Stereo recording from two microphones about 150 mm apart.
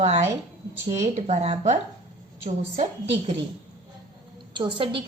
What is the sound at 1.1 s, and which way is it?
A woman's voice, 45° right (ahead or behind).